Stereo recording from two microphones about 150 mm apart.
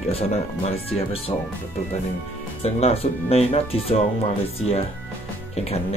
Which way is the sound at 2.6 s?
40° left (ahead or behind).